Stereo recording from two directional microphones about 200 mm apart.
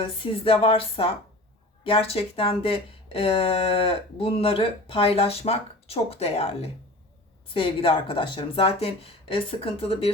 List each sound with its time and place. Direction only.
0.0 s speech: 30° left (ahead or behind)